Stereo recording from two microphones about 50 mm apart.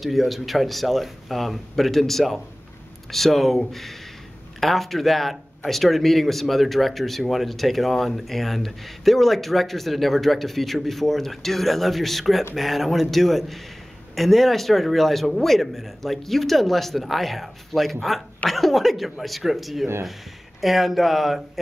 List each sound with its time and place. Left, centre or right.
0.0 s speech: centre